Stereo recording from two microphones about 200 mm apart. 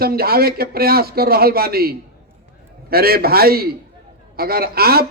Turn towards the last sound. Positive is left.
turn(degrees=-50)  # may be behind; listen again after turning